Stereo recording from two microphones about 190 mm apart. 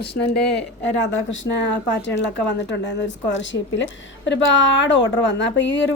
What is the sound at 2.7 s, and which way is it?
A woman's voice, 65° left (ahead or behind).